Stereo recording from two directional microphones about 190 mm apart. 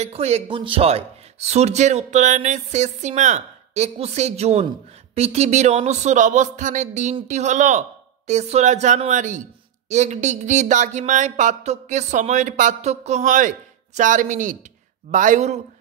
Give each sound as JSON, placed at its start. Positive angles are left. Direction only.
{"t": 0.0, "sound": "speech", "side_deg": -35}